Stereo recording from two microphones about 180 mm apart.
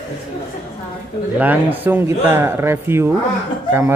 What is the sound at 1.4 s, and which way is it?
Music, 10° right (ahead or behind).